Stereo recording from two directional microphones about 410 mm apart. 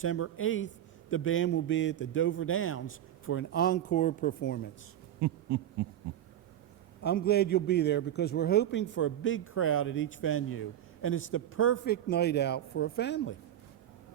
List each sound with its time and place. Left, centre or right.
0.0 s a man's voice: left
5.2 s owl: right
7.0 s a man's voice: left